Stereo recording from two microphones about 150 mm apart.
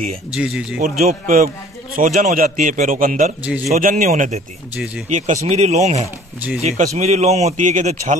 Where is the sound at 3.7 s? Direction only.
55° right (ahead or behind).